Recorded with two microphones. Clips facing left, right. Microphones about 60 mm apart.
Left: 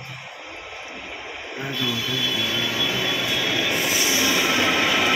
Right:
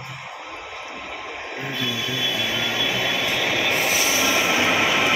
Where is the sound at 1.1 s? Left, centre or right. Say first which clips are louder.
Right 3 dB; right.